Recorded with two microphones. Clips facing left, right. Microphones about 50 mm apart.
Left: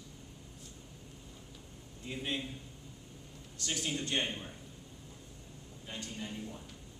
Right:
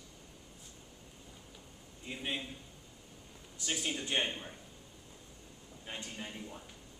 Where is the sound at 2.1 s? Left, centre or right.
Centre.